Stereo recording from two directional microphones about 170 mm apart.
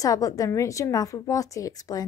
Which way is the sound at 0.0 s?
20° left (ahead or behind).